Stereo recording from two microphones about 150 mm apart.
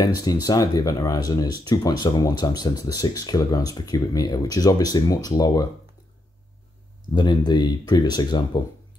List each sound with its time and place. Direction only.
0.0 s speech: 25° left (ahead or behind)
7.2 s speech: 30° left (ahead or behind)